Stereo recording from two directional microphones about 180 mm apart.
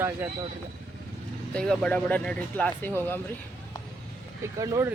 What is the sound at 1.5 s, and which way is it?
Speech, 5° left (ahead or behind).